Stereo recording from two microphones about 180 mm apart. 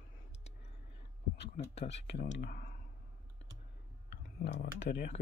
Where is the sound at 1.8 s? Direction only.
40° left (ahead or behind).